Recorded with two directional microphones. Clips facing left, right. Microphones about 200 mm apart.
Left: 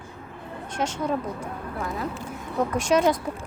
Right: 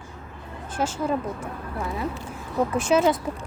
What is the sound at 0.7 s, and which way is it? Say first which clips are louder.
Speech: right 1 dB; 5° right (ahead or behind).